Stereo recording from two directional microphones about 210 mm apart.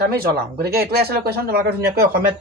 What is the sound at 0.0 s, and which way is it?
Speech, 45° right (ahead or behind).